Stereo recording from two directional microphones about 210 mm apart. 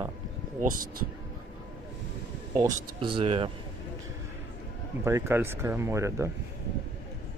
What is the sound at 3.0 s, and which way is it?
Speech, 25° right (ahead or behind).